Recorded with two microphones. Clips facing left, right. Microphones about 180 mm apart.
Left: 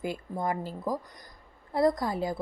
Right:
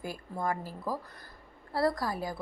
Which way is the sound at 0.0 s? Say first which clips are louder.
Left 3 dB; 20° left (ahead or behind).